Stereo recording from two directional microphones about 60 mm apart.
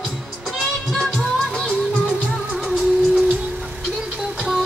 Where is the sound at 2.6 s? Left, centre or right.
Centre.